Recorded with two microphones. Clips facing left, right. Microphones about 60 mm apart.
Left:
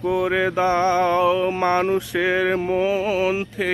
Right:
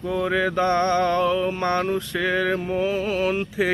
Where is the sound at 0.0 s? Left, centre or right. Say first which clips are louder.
Left 3 dB; centre.